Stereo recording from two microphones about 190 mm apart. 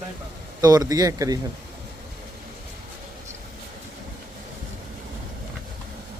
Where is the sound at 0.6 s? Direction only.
20° right (ahead or behind).